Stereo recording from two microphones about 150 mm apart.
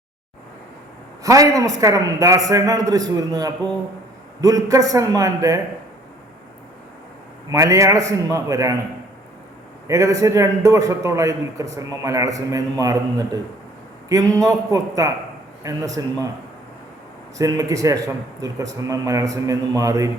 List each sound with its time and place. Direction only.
1.2 s a man's voice: 20° right (ahead or behind)
7.5 s a man's voice: 20° right (ahead or behind)
9.8 s a man's voice: 20° right (ahead or behind)
17.3 s a man's voice: 20° right (ahead or behind)